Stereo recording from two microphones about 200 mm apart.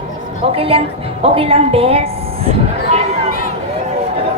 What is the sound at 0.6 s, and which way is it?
A woman's voice, 30° right (ahead or behind).